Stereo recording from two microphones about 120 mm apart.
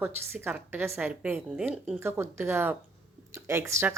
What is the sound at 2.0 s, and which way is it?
Speech, 20° right (ahead or behind).